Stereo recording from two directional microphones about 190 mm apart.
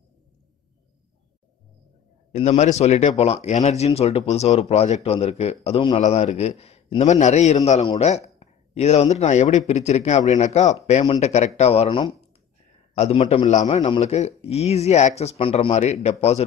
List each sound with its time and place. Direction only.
2.3 s speech: 35° left (ahead or behind)